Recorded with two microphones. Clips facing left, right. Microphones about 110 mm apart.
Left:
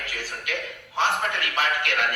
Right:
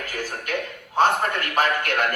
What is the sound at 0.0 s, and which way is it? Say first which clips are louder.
A man's voice: right 4 dB; 45° right (ahead or behind).